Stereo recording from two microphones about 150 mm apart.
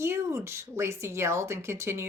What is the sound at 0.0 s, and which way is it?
Speech, 15° right (ahead or behind).